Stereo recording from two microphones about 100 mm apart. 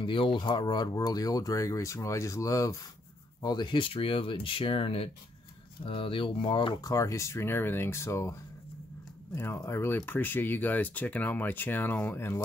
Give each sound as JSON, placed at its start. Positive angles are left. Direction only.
{"t": 0.0, "sound": "speech", "side_deg": 60}
{"t": 3.4, "sound": "speech", "side_deg": 45}
{"t": 6.8, "sound": "speech", "side_deg": 35}